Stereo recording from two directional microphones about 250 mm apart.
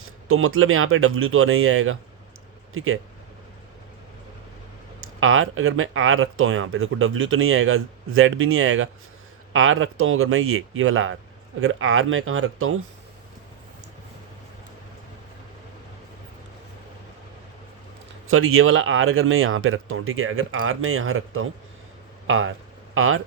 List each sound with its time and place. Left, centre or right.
0.0 s speech: right
5.2 s speech: right
18.3 s speech: right